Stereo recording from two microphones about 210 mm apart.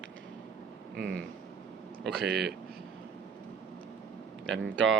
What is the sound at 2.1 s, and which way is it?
Speech, 50° right (ahead or behind).